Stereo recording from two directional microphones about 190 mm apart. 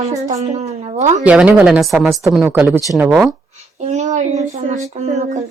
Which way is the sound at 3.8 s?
35° right (ahead or behind).